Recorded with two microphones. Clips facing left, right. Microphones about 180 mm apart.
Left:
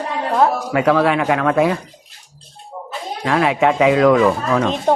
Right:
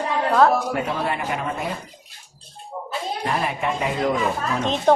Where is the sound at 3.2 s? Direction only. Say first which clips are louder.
Left 10 dB; 90° left.